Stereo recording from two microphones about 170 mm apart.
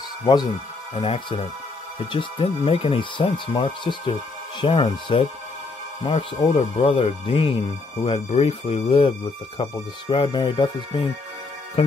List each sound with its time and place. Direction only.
0.2 s speech: 25° left (ahead or behind)